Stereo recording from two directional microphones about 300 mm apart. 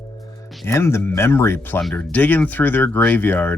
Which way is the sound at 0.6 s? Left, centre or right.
Centre.